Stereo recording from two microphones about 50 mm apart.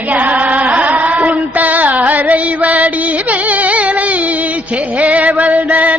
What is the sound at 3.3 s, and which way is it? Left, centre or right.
Carnatic music, right.